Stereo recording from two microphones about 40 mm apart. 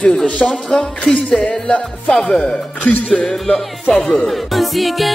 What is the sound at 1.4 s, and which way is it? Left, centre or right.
Speech, left.